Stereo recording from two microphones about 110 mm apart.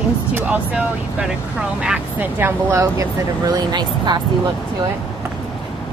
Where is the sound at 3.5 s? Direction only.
40° right (ahead or behind).